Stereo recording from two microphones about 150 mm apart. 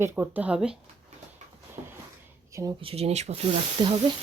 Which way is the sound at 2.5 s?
20° right (ahead or behind).